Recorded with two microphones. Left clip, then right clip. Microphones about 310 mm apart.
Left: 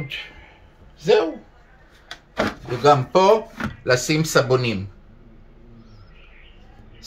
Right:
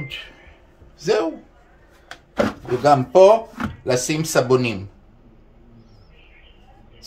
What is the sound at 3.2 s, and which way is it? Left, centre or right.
Speech, centre.